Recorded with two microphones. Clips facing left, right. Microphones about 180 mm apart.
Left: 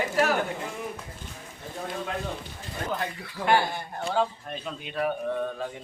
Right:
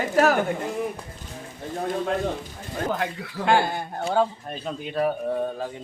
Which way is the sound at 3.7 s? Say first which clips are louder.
Right 4 dB; 50° right (ahead or behind).